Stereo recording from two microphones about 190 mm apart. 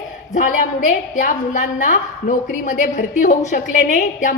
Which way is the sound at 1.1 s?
40° left (ahead or behind).